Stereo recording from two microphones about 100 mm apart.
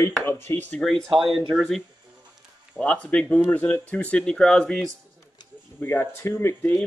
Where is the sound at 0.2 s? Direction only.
25° left (ahead or behind).